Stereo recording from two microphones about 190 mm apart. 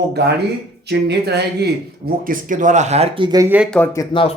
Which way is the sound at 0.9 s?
60° right (ahead or behind).